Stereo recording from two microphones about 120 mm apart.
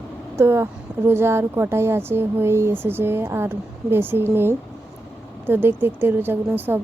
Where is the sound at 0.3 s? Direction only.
20° right (ahead or behind).